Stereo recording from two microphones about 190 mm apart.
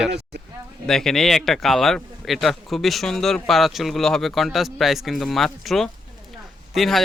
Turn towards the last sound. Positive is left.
turn(degrees=0)  # may be behind; listen again after turning